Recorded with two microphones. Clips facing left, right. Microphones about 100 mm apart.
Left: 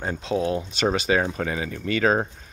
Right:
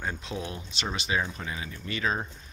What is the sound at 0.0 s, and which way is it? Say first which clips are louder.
Speech: left 9 dB; 35° left (ahead or behind).